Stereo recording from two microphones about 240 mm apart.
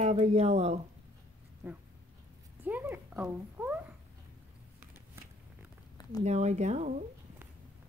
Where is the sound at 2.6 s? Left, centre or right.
Centre.